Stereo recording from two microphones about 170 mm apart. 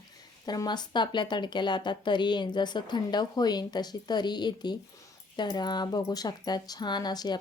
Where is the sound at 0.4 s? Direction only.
25° left (ahead or behind).